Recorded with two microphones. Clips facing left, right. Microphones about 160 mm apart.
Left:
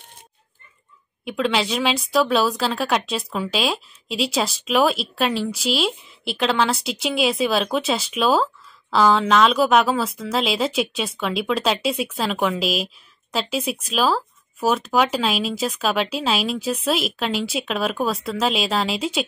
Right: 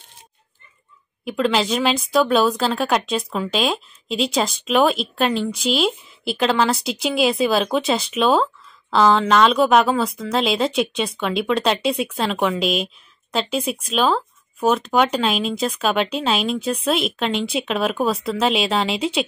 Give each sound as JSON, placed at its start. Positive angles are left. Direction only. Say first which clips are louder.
{"t": 1.2, "sound": "speech", "louder": "right 2 dB", "side_deg": 0}